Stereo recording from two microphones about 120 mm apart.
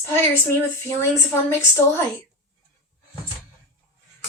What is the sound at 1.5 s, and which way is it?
Speech, 20° left (ahead or behind).